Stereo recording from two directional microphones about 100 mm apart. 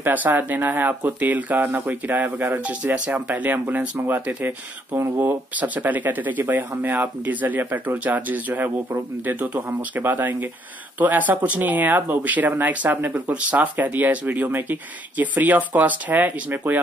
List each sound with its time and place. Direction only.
0.0 s speech: 20° right (ahead or behind)